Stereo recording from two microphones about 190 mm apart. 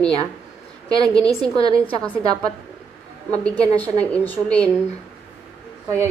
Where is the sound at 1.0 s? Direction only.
5° left (ahead or behind).